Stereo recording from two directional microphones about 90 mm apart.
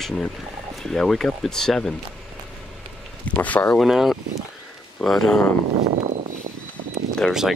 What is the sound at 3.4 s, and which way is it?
Speech, 15° left (ahead or behind).